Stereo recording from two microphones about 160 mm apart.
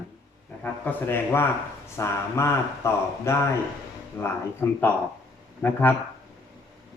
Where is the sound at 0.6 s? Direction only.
10° left (ahead or behind).